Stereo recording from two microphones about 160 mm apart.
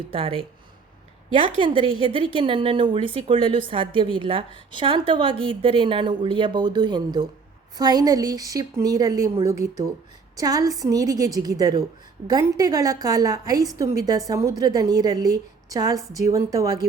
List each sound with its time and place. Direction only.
0.1 s a woman's voice: 35° right (ahead or behind)